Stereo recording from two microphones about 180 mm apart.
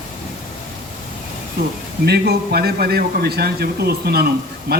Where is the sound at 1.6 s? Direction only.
60° right (ahead or behind).